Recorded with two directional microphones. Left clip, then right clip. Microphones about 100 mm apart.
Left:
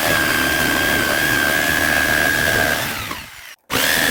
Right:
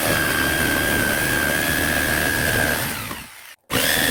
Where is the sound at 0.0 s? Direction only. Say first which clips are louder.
Left 3 dB; 45° left (ahead or behind).